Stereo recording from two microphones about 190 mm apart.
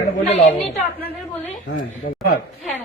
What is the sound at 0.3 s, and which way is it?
Speech, 40° left (ahead or behind).